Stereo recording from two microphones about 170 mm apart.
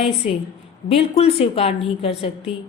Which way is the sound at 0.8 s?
35° left (ahead or behind).